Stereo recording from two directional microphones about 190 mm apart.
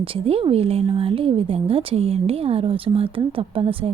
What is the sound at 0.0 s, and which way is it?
A woman's voice, 30° right (ahead or behind).